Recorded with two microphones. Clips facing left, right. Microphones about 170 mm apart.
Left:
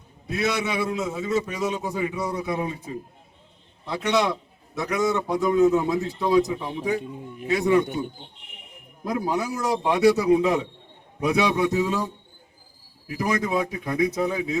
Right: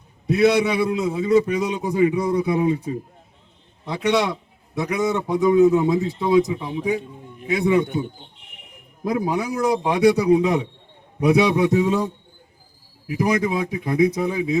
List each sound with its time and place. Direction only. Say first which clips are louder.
0.4 s a man's voice: right 8 dB; 15° right (ahead or behind)
3.8 s a man's voice: right 2 dB; 15° right (ahead or behind)
9.1 s a man's voice: right 3 dB; 15° right (ahead or behind)